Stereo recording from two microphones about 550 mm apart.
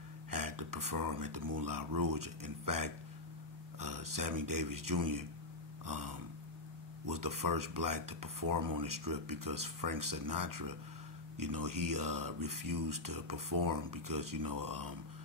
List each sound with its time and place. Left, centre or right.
0.3 s speech: right